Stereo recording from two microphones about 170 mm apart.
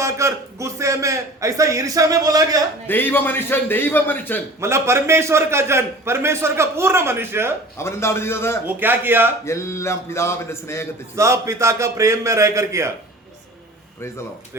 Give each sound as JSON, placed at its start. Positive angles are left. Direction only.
{"t": 0.0, "sound": "a man's voice", "side_deg": -15}
{"t": 2.8, "sound": "a man's voice", "side_deg": 10}
{"t": 4.6, "sound": "a man's voice", "side_deg": -15}
{"t": 7.8, "sound": "a man's voice", "side_deg": 15}
{"t": 8.6, "sound": "a man's voice", "side_deg": -10}
{"t": 9.4, "sound": "a man's voice", "side_deg": 15}
{"t": 11.1, "sound": "a man's voice", "side_deg": -15}